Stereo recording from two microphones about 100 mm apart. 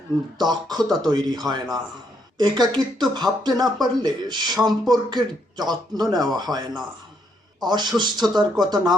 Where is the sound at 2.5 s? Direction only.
45° right (ahead or behind).